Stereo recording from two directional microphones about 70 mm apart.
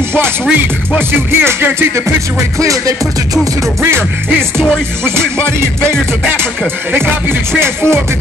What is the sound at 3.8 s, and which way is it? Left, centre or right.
Music, right.